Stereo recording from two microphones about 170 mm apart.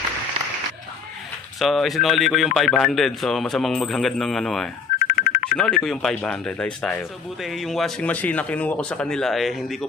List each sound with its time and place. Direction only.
1.5 s speech: centre (ahead or behind)
4.9 s a sound: 55° left (ahead or behind)
5.5 s speech: 5° left (ahead or behind)